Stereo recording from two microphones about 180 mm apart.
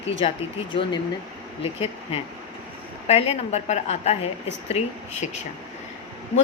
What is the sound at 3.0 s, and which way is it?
A woman's voice, 35° left (ahead or behind).